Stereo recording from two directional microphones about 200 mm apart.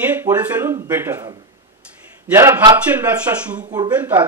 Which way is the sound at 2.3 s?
15° right (ahead or behind).